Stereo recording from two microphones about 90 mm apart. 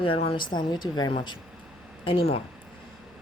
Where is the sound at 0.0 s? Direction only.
80° left; by 1.4 s 60° left (ahead or behind).